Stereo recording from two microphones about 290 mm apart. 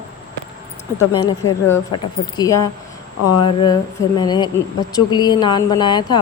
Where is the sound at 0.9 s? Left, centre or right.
Centre.